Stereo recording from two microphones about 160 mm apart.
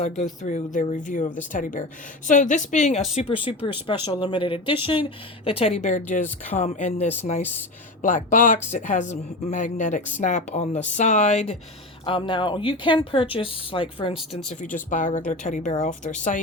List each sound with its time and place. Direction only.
0.4 s speech: 50° left (ahead or behind)
3.6 s speech: 35° left (ahead or behind)
12.0 s speech: 30° left (ahead or behind)
14.3 s speech: 50° left (ahead or behind)